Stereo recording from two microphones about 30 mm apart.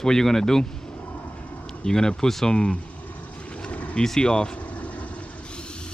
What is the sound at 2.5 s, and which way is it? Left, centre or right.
Speech, left.